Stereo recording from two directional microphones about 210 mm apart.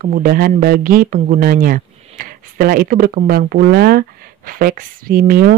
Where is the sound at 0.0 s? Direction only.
40° right (ahead or behind).